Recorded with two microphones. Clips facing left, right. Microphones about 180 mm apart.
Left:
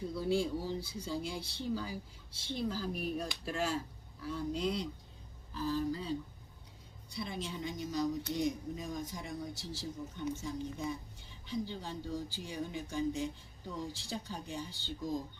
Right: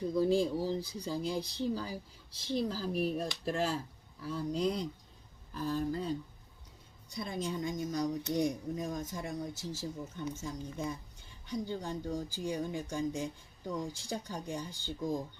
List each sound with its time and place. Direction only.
0.2 s speech: 40° right (ahead or behind)
10.3 s speech: 45° right (ahead or behind)